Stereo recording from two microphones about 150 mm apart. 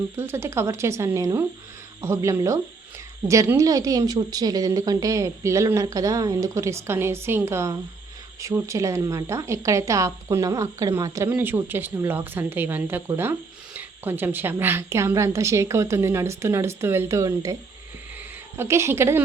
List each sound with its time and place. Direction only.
0.2 s a woman's voice: 15° right (ahead or behind)